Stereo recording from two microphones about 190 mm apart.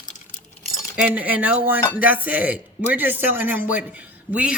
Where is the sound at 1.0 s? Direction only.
5° right (ahead or behind).